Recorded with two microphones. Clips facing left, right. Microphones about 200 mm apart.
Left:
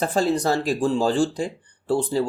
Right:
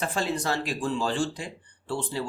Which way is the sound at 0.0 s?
40° left (ahead or behind).